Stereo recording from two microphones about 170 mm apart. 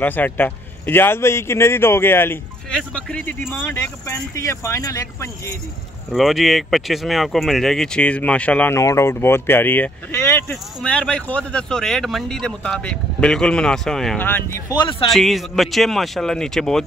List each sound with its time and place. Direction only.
0.0 s a man's voice: 10° left (ahead or behind)
6.1 s speech: centre (ahead or behind)
14.8 s speech: 30° left (ahead or behind)
15.0 s speech: centre (ahead or behind)